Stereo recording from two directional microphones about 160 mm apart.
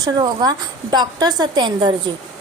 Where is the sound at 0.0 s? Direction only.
25° right (ahead or behind).